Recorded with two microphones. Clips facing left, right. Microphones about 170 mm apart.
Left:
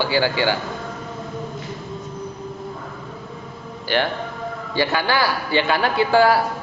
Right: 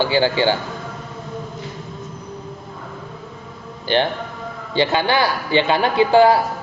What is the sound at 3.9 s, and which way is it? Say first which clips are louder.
A man's voice: right 3 dB; 20° right (ahead or behind).